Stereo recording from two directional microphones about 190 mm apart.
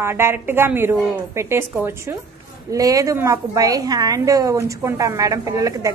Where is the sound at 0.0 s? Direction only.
10° right (ahead or behind).